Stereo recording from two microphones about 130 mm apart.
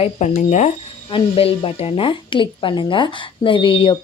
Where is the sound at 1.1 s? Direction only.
45° left (ahead or behind).